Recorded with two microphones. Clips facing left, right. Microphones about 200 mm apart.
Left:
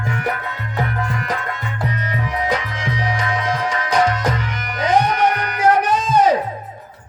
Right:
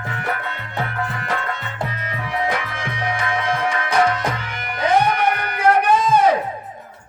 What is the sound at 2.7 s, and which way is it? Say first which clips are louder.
Music: left 2 dB; 55° right (ahead or behind).